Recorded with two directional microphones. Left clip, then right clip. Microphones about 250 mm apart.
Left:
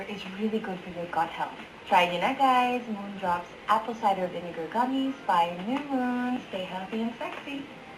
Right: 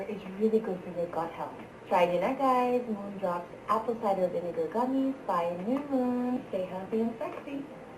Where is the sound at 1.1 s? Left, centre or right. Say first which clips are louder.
Left 5 dB; centre.